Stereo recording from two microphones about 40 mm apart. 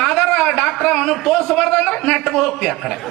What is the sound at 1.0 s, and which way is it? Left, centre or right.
A man's voice, centre.